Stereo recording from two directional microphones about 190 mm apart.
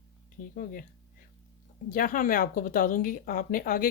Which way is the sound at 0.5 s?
45° left (ahead or behind).